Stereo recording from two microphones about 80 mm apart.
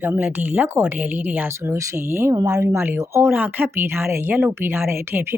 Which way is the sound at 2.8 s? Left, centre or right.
Right.